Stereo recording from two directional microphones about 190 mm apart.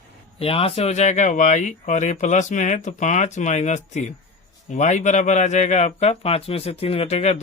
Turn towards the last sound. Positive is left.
turn(degrees=35)  # may be behind; listen again after turning